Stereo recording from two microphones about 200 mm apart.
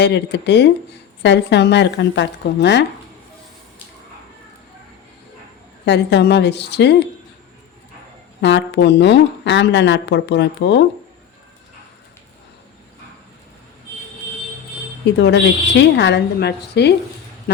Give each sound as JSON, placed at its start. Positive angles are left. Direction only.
{"t": 0.0, "sound": "speech", "side_deg": 60}
{"t": 5.8, "sound": "speech", "side_deg": 60}
{"t": 8.4, "sound": "speech", "side_deg": 60}
{"t": 15.2, "sound": "speech", "side_deg": 60}